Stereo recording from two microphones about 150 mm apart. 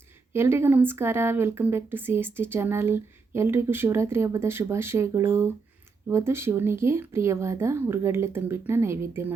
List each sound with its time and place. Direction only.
0.3 s speech: 15° right (ahead or behind)